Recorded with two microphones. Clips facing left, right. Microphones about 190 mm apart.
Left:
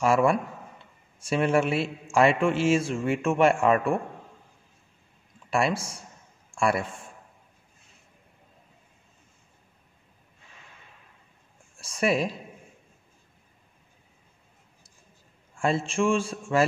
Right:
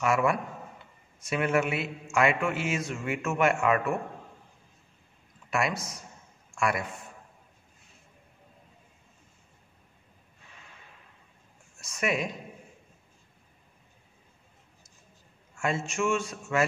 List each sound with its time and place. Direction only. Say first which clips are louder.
0.0 s a man's voice: left 4 dB; 30° left (ahead or behind)
5.5 s a man's voice: left 4 dB; 30° left (ahead or behind)
11.7 s a woman's voice: left 5 dB; 30° left (ahead or behind)
15.6 s speech: left 4 dB; 30° left (ahead or behind)